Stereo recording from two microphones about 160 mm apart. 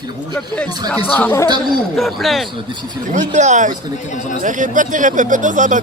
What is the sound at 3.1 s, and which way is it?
Speech, 50° right (ahead or behind).